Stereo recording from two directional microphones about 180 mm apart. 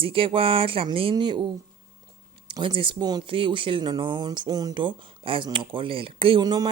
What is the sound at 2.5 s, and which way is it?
Speech, 25° right (ahead or behind).